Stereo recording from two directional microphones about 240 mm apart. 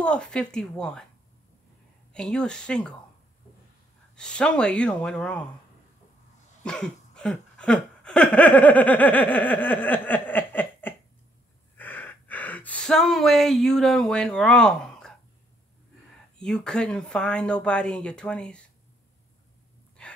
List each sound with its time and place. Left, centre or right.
0.0 s speech: centre
2.1 s speech: centre
4.1 s speech: centre
6.6 s a sound: centre
11.7 s speech: centre
16.3 s speech: centre
20.0 s breathing: centre